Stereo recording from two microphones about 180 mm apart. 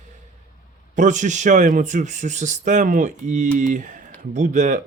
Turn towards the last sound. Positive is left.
turn(degrees=-45)  # may be behind; listen again after turning